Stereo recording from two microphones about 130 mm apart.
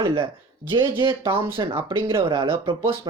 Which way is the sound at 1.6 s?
40° right (ahead or behind).